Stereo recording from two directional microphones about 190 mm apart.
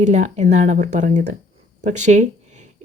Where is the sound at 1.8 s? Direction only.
40° right (ahead or behind).